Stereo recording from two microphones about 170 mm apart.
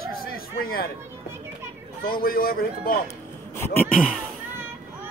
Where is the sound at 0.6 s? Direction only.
60° left (ahead or behind).